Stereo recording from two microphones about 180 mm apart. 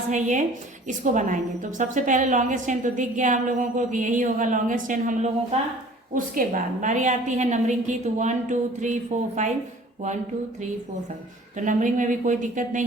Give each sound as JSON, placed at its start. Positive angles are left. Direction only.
{"t": 0.1, "sound": "a woman's voice", "side_deg": -45}
{"t": 11.5, "sound": "a woman's voice", "side_deg": -45}